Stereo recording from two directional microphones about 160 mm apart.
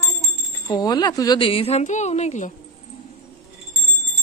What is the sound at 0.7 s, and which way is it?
A woman's voice, 25° left (ahead or behind).